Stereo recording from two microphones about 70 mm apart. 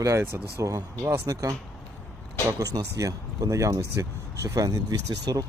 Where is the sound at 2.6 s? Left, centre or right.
Right.